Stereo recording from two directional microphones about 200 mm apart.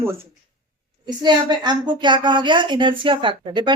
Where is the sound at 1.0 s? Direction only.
20° right (ahead or behind).